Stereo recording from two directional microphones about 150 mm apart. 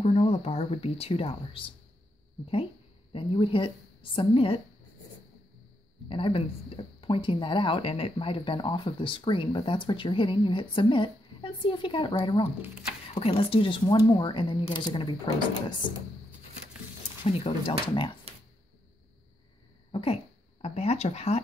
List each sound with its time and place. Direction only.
0.0 s speech: 45° left (ahead or behind)
3.1 s speech: 35° left (ahead or behind)
6.0 s speech: 35° left (ahead or behind)
17.2 s speech: 35° left (ahead or behind)
19.9 s speech: 40° left (ahead or behind)